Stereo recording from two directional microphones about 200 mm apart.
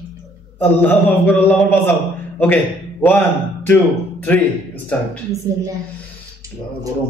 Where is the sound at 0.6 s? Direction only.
10° left (ahead or behind).